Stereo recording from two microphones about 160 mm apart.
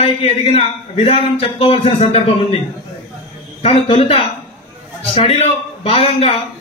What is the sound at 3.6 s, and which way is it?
A man's voice, 40° left (ahead or behind).